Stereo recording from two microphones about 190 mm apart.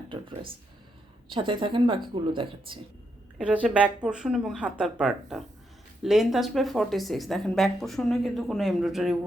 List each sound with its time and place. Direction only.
0.1 s a sound: 25° right (ahead or behind)
1.3 s a woman's voice: 25° right (ahead or behind)
3.3 s speech: 5° right (ahead or behind)